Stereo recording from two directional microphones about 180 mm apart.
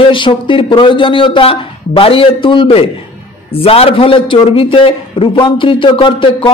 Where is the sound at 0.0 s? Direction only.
30° left (ahead or behind).